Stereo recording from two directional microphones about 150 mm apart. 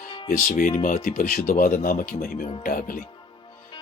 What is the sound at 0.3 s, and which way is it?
Speech, 60° left (ahead or behind).